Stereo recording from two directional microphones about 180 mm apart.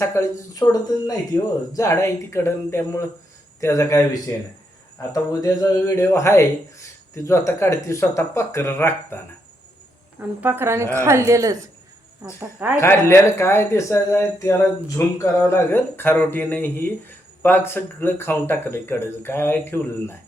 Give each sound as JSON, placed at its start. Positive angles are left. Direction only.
{"t": 0.0, "sound": "speech", "side_deg": 15}
{"t": 10.2, "sound": "a woman's voice", "side_deg": -10}
{"t": 12.7, "sound": "speech", "side_deg": 15}